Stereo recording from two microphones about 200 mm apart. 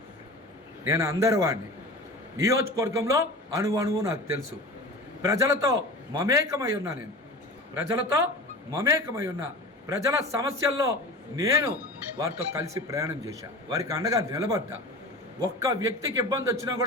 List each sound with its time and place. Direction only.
0.9 s speech: 15° right (ahead or behind)